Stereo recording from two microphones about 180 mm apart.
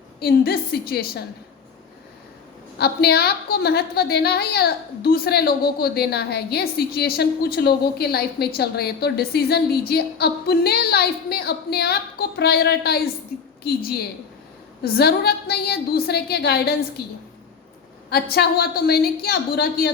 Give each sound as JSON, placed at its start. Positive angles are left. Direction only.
{"t": 0.2, "sound": "a woman's voice", "side_deg": 60}
{"t": 2.7, "sound": "a woman's voice", "side_deg": 65}